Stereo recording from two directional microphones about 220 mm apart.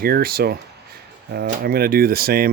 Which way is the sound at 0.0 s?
45° right (ahead or behind).